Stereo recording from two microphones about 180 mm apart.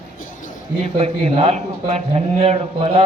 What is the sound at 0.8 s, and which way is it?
A man's voice, 35° right (ahead or behind).